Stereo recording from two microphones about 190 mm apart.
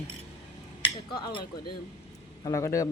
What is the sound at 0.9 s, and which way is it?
Speech, 25° left (ahead or behind).